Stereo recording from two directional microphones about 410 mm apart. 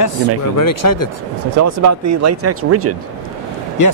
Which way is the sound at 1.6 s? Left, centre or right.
Right.